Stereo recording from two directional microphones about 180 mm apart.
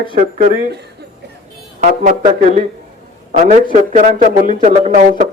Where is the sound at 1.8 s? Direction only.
50° right (ahead or behind).